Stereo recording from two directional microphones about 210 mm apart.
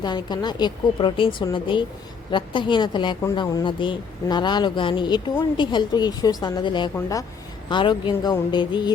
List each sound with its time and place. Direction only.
0.0 s speech: 20° left (ahead or behind)